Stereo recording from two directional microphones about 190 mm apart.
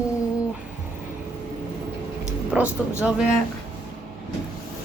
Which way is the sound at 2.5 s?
5° right (ahead or behind).